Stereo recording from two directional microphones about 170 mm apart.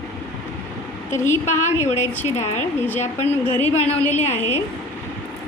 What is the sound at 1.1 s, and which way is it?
Speech, 15° left (ahead or behind).